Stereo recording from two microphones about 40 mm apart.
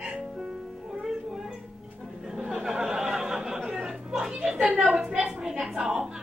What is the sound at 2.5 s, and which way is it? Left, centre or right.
Chatter, centre.